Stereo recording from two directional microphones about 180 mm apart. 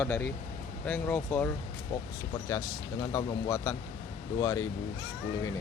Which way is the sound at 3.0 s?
20° left (ahead or behind).